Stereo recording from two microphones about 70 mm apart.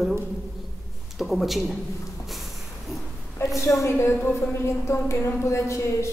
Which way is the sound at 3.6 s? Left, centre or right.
Left.